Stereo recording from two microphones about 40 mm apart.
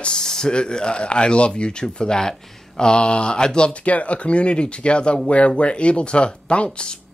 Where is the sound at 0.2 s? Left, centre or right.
Centre.